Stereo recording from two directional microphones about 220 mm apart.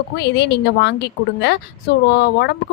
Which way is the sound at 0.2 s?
50° left (ahead or behind).